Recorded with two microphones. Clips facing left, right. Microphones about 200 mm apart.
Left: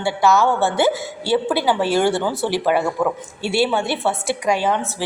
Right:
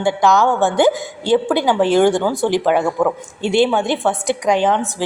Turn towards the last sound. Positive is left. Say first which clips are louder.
# right 4 dB
turn(degrees=-15)  # may be behind; listen again after turning